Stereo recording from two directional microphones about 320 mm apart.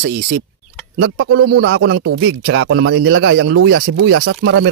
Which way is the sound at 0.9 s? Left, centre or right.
Right.